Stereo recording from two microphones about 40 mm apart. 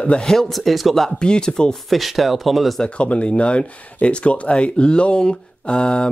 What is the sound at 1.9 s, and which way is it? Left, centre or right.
Speech, centre.